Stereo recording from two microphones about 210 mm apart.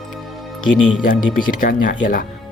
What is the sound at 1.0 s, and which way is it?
Speech, 40° left (ahead or behind).